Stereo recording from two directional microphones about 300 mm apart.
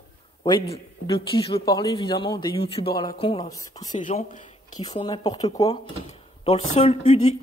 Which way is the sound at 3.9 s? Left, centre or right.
Left.